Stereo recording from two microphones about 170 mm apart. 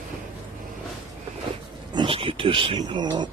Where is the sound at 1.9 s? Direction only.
30° right (ahead or behind).